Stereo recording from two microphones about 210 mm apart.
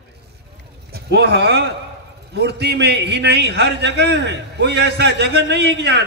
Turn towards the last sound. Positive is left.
turn(degrees=-50)  # may be behind; listen again after turning